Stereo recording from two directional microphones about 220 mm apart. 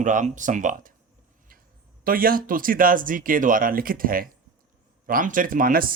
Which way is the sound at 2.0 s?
40° right (ahead or behind).